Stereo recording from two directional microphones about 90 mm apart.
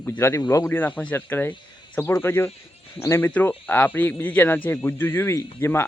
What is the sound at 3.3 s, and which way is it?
A man's voice, 15° left (ahead or behind).